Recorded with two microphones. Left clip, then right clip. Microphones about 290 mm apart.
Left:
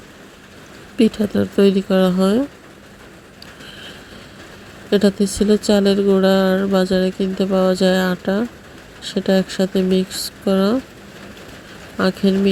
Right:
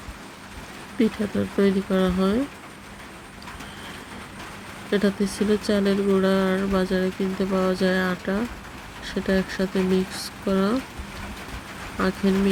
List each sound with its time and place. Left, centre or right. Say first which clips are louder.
0.9 s speech: left 7 dB; centre
4.9 s speech: left 7 dB; centre
11.9 s speech: left 6 dB; centre